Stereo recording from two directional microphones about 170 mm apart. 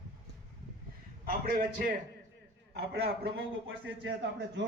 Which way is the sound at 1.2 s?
60° right (ahead or behind).